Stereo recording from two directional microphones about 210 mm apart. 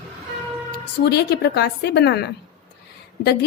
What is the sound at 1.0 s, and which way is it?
A woman's voice, 50° left (ahead or behind).